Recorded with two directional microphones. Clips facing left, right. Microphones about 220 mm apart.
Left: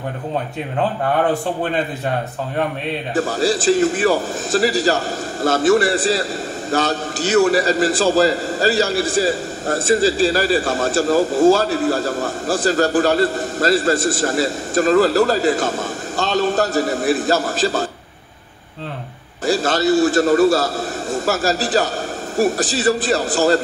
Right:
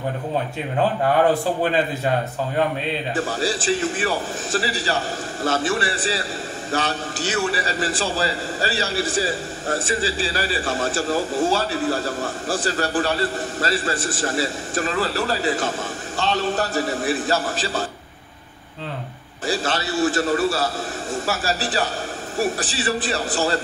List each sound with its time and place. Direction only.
3.2 s a man's voice: 40° left (ahead or behind)
19.4 s a man's voice: 40° left (ahead or behind)